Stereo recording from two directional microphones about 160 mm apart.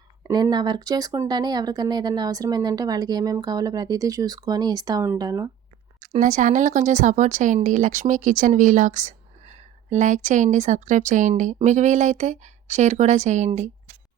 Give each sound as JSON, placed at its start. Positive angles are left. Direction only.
{"t": 0.3, "sound": "speech", "side_deg": -25}
{"t": 6.0, "sound": "speech", "side_deg": -50}